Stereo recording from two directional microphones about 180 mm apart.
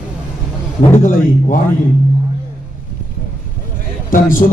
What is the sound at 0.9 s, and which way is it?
Speech, 50° left (ahead or behind).